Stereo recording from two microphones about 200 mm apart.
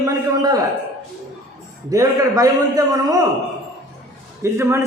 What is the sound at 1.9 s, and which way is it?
A man's voice, 15° right (ahead or behind).